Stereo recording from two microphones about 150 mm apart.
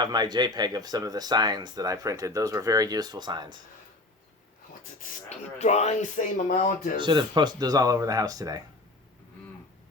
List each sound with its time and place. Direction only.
0.0 s speech: 30° right (ahead or behind)
5.5 s speech: 50° left (ahead or behind); by 7.0 s 65° left (ahead or behind)
7.0 s speech: 30° right (ahead or behind)